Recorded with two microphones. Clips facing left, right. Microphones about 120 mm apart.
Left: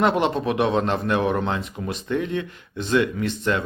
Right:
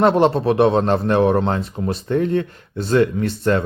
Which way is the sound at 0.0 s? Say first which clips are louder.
Right 6 dB; 35° right (ahead or behind).